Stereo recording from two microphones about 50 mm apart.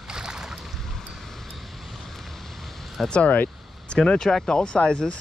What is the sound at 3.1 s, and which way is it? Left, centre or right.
Speech, left.